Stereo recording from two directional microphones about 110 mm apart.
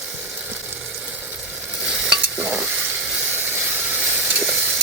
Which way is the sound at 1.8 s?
10° right (ahead or behind).